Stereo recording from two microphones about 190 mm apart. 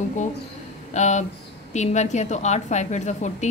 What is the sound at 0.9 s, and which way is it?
A woman's voice, 40° left (ahead or behind).